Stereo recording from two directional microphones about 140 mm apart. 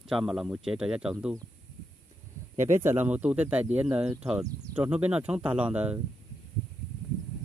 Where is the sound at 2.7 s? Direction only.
15° right (ahead or behind).